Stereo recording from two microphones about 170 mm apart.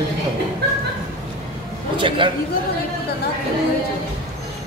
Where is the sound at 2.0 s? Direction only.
30° right (ahead or behind).